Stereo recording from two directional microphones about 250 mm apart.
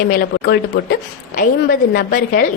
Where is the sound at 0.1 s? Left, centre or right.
Left.